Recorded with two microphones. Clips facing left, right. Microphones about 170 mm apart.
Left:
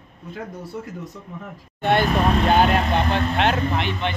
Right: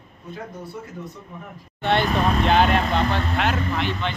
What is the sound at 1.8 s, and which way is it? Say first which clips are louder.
Vehicle: left 2 dB; 10° left (ahead or behind).